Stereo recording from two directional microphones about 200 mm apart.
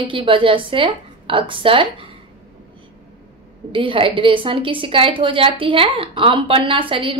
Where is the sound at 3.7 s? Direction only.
25° right (ahead or behind).